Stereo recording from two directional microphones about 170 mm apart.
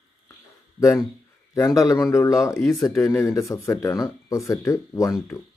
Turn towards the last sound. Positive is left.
turn(degrees=20)  # may be behind; listen again after turning